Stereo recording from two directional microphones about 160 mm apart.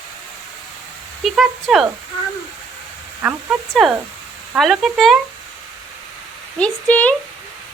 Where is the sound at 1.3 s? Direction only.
Centre (ahead or behind).